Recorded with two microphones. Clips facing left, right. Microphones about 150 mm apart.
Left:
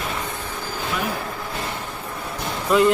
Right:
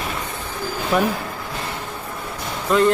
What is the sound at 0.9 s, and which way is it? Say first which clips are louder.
Speech: right 9 dB; 60° right (ahead or behind).